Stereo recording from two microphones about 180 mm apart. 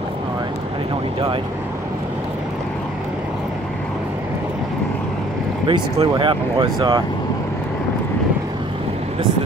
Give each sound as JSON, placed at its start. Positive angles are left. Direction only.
{"t": 5.7, "sound": "speech", "side_deg": -30}